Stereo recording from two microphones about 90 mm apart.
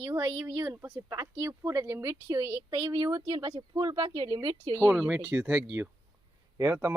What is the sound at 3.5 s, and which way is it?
Speech, 55° right (ahead or behind).